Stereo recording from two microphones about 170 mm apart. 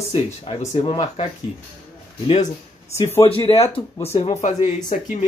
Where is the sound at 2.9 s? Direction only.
15° left (ahead or behind).